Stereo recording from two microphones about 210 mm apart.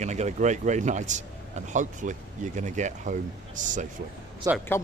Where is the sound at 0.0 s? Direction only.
35° right (ahead or behind).